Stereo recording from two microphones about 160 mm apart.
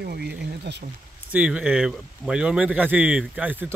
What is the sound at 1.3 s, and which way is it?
Speech, 10° right (ahead or behind).